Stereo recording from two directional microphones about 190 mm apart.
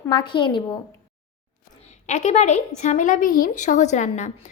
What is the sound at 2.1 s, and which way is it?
Speech, 40° left (ahead or behind).